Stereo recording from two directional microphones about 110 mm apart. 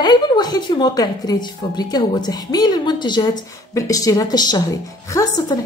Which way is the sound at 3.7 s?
30° left (ahead or behind).